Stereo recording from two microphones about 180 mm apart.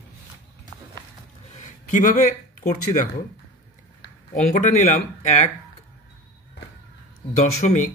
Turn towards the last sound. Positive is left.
turn(degrees=40)  # may be behind; listen again after turning